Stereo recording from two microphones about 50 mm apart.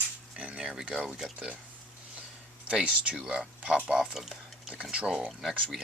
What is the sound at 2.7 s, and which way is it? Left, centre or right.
Speech, right.